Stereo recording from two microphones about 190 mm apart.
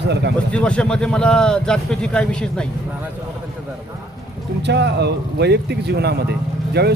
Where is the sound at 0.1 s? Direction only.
60° right (ahead or behind).